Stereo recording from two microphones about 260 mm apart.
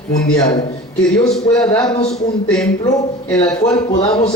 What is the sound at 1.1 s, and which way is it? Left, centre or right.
Speech, centre.